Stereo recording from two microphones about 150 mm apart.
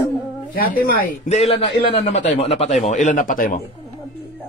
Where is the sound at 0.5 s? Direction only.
70° left (ahead or behind).